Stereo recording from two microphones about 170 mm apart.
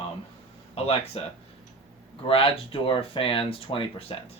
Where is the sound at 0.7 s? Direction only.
35° left (ahead or behind).